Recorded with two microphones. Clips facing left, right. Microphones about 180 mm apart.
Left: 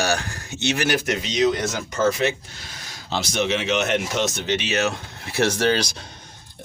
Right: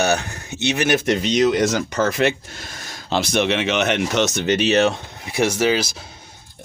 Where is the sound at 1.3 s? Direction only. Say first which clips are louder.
Right 4 dB; 85° right; by 4.5 s 70° right (ahead or behind).